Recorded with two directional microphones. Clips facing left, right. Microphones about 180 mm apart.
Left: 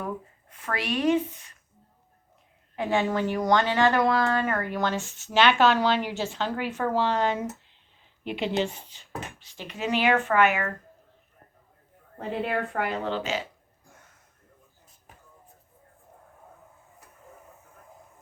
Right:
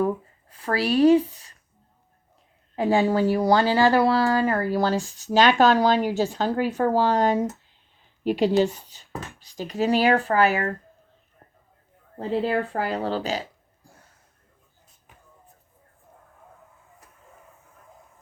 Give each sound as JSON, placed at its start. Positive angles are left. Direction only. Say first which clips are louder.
{"t": 0.0, "sound": "speech", "louder": "right 9 dB", "side_deg": -35}
{"t": 2.7, "sound": "speech", "louder": "right 5 dB", "side_deg": -35}
{"t": 12.2, "sound": "speech", "louder": "right 5 dB", "side_deg": -30}